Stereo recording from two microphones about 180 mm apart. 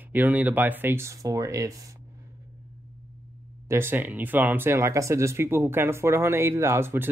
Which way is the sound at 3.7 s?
10° right (ahead or behind).